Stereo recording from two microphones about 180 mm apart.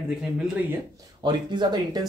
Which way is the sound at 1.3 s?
25° right (ahead or behind).